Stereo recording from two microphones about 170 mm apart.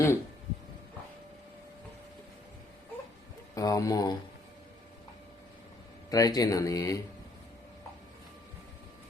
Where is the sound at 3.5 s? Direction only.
20° left (ahead or behind).